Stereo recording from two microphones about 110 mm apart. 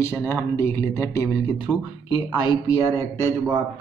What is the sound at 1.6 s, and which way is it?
Speech, 45° left (ahead or behind).